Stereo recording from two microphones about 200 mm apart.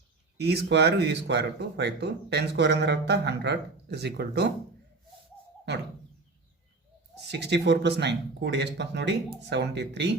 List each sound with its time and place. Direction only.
0.3 s speech: 55° right (ahead or behind)
7.3 s speech: 60° right (ahead or behind)